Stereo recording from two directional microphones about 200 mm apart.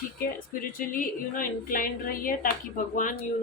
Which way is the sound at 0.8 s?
45° left (ahead or behind).